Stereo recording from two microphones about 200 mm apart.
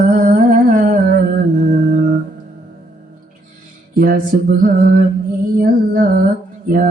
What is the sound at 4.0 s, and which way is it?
Music, 40° right (ahead or behind).